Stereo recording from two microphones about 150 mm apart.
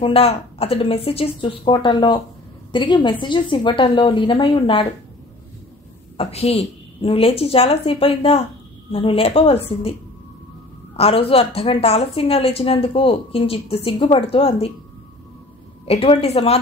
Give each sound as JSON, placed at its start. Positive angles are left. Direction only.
{"t": 0.0, "sound": "a woman's voice", "side_deg": 40}
{"t": 6.1, "sound": "a woman's voice", "side_deg": 40}
{"t": 11.0, "sound": "a woman's voice", "side_deg": 40}
{"t": 15.8, "sound": "a woman's voice", "side_deg": 40}